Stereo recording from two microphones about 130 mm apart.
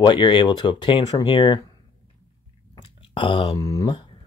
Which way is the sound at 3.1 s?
40° left (ahead or behind).